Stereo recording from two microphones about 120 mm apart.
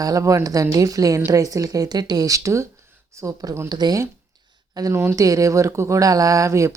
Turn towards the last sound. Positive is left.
turn(degrees=-25)  # may be behind; listen again after turning